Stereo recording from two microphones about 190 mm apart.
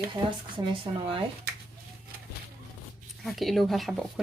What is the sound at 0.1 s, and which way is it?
Speech, 25° right (ahead or behind).